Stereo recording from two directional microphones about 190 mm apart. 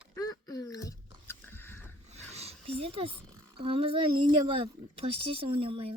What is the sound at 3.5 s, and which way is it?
Speech, 30° right (ahead or behind).